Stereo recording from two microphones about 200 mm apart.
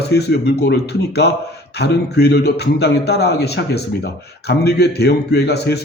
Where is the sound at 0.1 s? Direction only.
55° left (ahead or behind).